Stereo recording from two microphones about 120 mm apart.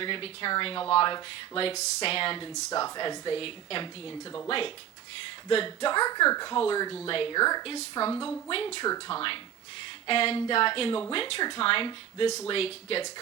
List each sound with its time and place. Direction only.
0.0 s speech: 45° left (ahead or behind)
2.8 s speech: 35° left (ahead or behind)
7.1 s speech: 50° left (ahead or behind)
7.3 s speech: 35° left (ahead or behind)
7.6 s speech: 50° left (ahead or behind)
8.8 s speech: 40° left (ahead or behind)
12.5 s speech: 55° left (ahead or behind)